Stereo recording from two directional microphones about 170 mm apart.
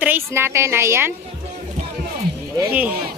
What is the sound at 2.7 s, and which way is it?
Speech, 10° right (ahead or behind).